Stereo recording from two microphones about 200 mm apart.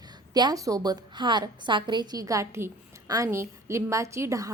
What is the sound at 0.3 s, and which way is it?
A woman's voice, 20° right (ahead or behind).